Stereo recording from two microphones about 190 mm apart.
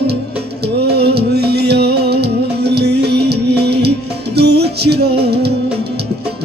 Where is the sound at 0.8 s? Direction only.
60° right (ahead or behind).